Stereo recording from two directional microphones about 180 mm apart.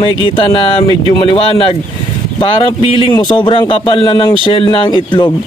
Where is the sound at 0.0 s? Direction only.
30° left (ahead or behind).